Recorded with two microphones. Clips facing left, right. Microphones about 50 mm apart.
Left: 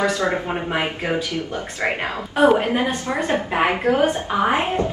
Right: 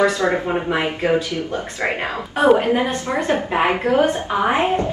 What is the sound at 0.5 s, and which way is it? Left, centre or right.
Speech, centre.